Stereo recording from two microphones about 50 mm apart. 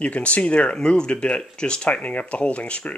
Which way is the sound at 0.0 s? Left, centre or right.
Left.